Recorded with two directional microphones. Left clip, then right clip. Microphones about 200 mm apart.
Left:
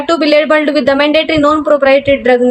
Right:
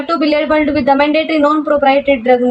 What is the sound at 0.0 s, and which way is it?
A woman's voice, 30° left (ahead or behind).